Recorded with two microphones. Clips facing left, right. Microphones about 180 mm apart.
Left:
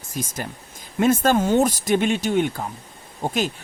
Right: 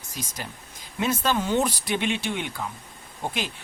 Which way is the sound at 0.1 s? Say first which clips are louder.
Left 7 dB; 50° left (ahead or behind).